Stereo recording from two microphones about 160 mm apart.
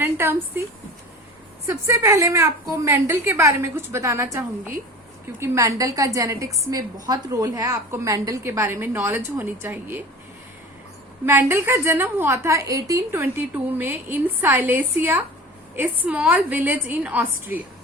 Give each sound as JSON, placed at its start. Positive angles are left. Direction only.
{"t": 0.0, "sound": "a woman's voice", "side_deg": -15}
{"t": 1.6, "sound": "a woman's voice", "side_deg": -20}
{"t": 11.3, "sound": "a woman's voice", "side_deg": -15}